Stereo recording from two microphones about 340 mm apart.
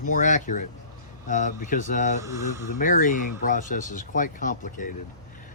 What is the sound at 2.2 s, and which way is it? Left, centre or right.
Speech, centre.